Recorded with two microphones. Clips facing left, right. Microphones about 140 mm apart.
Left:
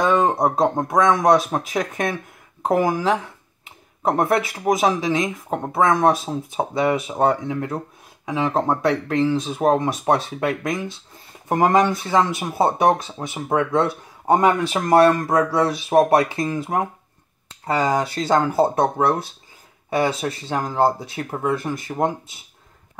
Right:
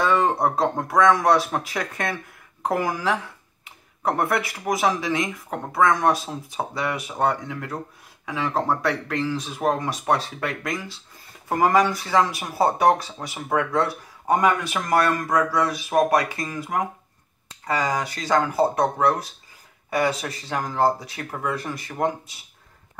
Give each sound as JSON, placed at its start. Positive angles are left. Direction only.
{"t": 0.0, "sound": "speech", "side_deg": 20}